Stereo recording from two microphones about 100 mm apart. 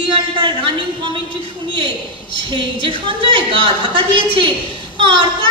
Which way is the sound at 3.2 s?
60° right (ahead or behind).